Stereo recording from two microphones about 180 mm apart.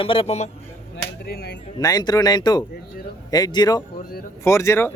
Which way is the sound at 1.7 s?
20° left (ahead or behind).